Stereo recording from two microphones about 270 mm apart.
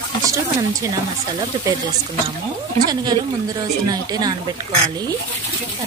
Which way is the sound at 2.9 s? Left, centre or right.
Centre.